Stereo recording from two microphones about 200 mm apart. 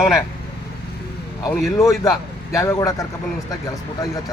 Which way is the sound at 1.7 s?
15° left (ahead or behind).